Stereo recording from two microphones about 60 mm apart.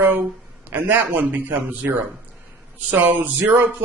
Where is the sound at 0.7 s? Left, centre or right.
Right.